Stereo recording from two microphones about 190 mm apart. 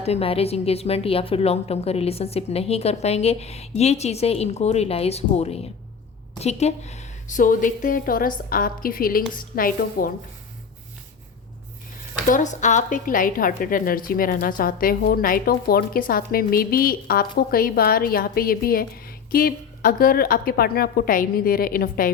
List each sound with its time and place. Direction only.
0.0 s a woman's voice: 30° left (ahead or behind); by 10.1 s 50° left (ahead or behind)
12.3 s a woman's voice: 40° left (ahead or behind)